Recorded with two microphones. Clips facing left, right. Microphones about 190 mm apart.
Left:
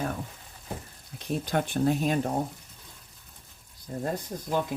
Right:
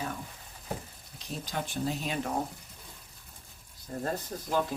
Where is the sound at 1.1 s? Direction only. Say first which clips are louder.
Left 8 dB; 55° left (ahead or behind).